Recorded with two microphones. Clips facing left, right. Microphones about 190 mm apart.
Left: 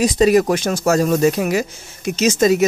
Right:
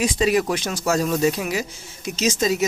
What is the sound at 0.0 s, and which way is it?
Speech, 40° left (ahead or behind).